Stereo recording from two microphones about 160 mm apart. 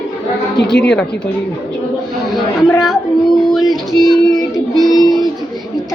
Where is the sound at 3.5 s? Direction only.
Centre (ahead or behind).